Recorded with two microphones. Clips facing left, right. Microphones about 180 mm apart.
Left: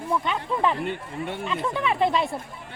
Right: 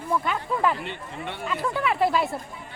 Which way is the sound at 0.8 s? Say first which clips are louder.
Left 4 dB; 45° left (ahead or behind).